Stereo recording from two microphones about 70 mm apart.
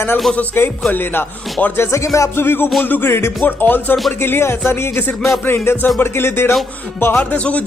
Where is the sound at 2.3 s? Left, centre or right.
Left.